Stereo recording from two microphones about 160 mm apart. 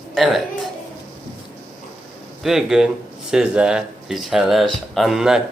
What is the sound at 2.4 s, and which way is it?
Speech, centre (ahead or behind).